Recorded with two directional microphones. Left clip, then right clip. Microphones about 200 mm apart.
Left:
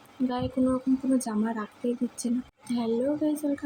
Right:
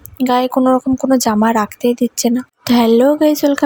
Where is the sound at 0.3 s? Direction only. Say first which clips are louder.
Right 16 dB; 55° right (ahead or behind).